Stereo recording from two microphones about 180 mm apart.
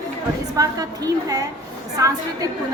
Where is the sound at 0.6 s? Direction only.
20° right (ahead or behind).